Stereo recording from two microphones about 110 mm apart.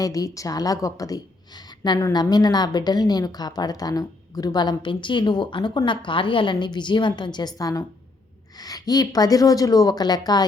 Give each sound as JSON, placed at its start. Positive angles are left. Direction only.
{"t": 0.0, "sound": "a woman's voice", "side_deg": 30}